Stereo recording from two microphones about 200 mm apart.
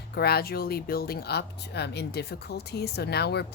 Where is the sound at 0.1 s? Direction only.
55° left (ahead or behind).